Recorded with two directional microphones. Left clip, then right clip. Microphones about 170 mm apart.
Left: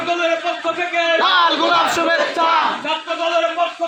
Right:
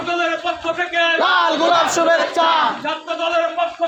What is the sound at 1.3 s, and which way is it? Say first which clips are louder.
Battle cry: left 1 dB; 50° right (ahead or behind).